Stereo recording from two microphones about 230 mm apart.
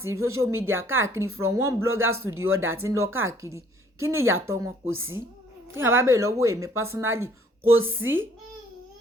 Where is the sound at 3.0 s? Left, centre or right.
Right.